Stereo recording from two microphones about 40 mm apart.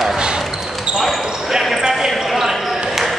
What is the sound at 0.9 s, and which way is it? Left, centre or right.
Basketball bounce, right.